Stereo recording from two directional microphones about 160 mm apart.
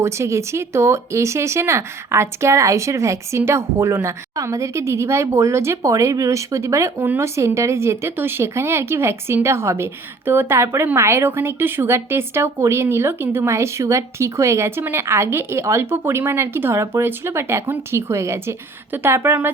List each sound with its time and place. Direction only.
0.0 s speech: 15° right (ahead or behind)